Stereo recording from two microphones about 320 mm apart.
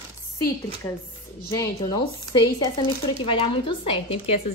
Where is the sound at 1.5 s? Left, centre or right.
Centre.